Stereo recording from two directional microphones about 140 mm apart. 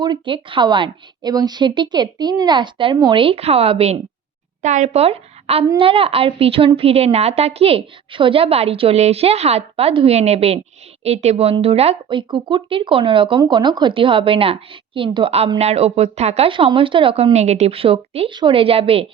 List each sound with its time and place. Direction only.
0.0 s a woman's voice: 35° right (ahead or behind)
4.6 s a woman's voice: 55° right (ahead or behind)